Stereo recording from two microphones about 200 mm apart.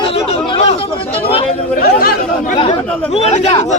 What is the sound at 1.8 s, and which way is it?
Chatter, 50° left (ahead or behind).